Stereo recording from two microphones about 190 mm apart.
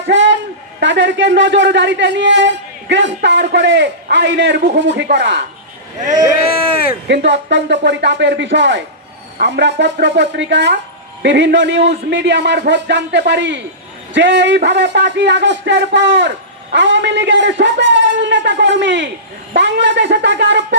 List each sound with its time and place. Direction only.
0.1 s a sound: 75° right (ahead or behind)
0.8 s a man's voice: 70° right (ahead or behind)
7.1 s a man's voice: 70° right (ahead or behind)